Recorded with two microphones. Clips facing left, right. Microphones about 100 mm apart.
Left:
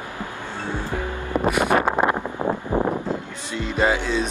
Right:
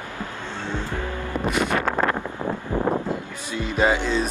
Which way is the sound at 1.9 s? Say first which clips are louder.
Left 2 dB; 15° left (ahead or behind).